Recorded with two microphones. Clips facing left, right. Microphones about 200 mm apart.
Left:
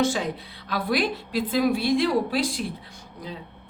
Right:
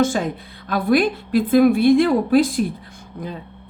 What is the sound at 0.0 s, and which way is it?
Speech, 50° right (ahead or behind).